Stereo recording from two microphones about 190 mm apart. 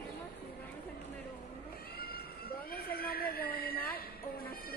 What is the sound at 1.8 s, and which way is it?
Cat, 55° left (ahead or behind).